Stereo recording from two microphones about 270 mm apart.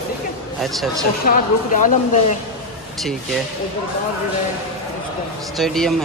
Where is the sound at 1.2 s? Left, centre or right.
Left.